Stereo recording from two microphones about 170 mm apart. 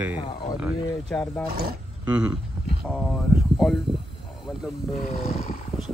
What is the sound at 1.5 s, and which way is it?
Speech, 65° right (ahead or behind).